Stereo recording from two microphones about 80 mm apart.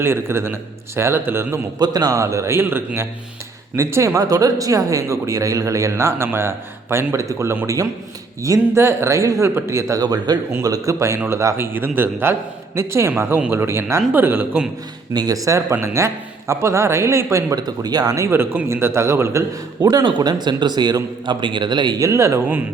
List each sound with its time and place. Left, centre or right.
0.0 s speech: right
1.8 s speech: right
10.0 s a man's voice: right
10.6 s speech: right
15.1 s speech: right
15.7 s speech: right
17.6 s speech: right
18.3 s speech: right
20.1 s a man's voice: right
21.9 s speech: right